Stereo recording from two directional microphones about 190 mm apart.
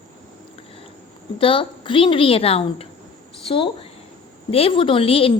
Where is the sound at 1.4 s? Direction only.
25° left (ahead or behind).